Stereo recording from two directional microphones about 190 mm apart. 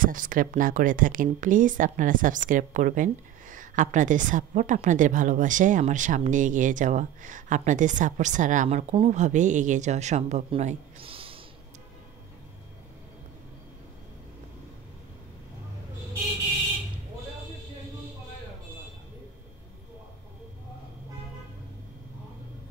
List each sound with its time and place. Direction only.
0.0 s speech: 45° right (ahead or behind); by 11.4 s 30° right (ahead or behind)